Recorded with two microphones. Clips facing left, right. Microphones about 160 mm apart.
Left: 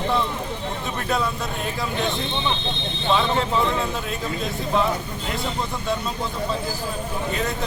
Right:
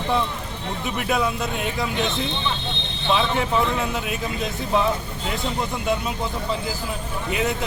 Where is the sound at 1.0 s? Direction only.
10° right (ahead or behind).